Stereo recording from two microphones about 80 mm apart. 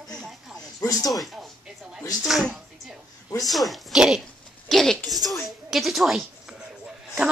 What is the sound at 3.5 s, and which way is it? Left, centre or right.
A woman's voice, centre.